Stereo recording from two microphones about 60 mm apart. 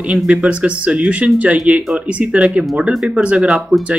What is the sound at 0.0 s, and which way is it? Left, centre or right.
Speech, right.